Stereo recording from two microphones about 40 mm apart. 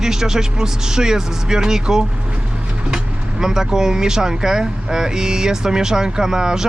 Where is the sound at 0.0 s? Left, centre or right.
Centre.